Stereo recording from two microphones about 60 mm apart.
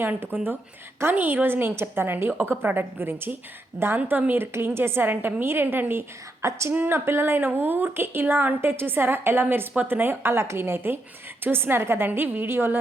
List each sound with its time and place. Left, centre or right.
0.0 s speech: right
6.4 s a woman's voice: right
6.7 s speech: right